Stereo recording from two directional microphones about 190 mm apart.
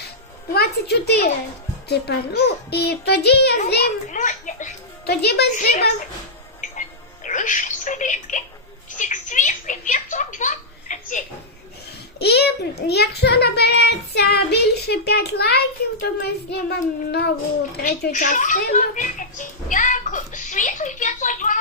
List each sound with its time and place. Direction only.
0.5 s a child's voice: 60° left (ahead or behind); by 4.7 s 40° left (ahead or behind)
5.0 s a child's voice: 60° left (ahead or behind)
7.3 s speech: 40° left (ahead or behind)
9.0 s a sound: 40° left (ahead or behind)
12.2 s a child's voice: 60° left (ahead or behind)
18.1 s a child's voice: 40° left (ahead or behind)